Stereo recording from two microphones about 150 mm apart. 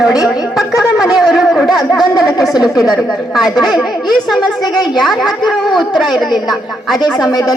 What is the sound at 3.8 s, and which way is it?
A woman's voice, centre (ahead or behind).